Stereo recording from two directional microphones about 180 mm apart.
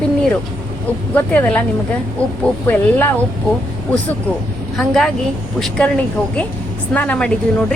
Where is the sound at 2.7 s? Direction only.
10° left (ahead or behind).